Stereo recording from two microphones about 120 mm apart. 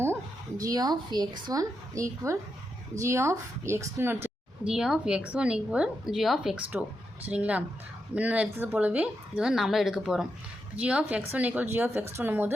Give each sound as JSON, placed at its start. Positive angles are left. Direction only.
{"t": 0.6, "sound": "a woman's voice", "side_deg": -30}
{"t": 4.6, "sound": "a woman's voice", "side_deg": -5}